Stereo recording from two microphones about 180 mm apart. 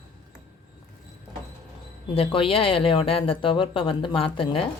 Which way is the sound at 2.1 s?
30° left (ahead or behind).